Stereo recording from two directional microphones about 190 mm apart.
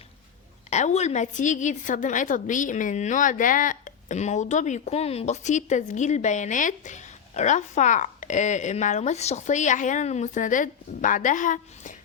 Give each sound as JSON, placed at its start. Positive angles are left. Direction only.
{"t": 0.7, "sound": "a woman's voice", "side_deg": 35}